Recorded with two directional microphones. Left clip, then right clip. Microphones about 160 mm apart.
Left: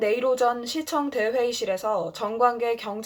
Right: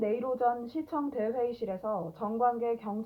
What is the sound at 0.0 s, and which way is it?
Speech, 15° left (ahead or behind).